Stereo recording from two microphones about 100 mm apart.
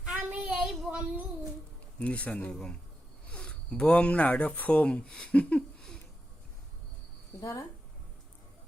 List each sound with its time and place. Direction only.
0.0 s child singing: 10° right (ahead or behind)
2.0 s speech: 15° left (ahead or behind)